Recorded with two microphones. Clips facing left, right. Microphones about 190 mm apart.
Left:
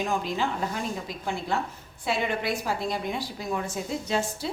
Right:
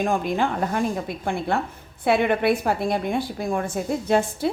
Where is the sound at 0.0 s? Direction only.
55° right (ahead or behind).